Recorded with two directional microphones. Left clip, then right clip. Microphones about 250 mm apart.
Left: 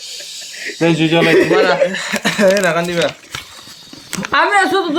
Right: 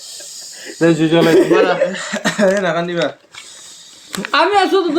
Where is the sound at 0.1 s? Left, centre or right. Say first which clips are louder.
Left 4 dB; centre.